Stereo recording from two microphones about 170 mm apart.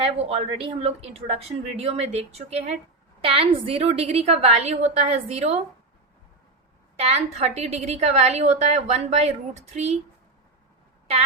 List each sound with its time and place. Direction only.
0.0 s a woman's voice: 35° right (ahead or behind)
6.9 s a woman's voice: 40° right (ahead or behind)